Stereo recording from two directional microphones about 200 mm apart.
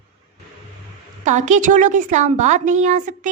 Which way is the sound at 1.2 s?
35° right (ahead or behind).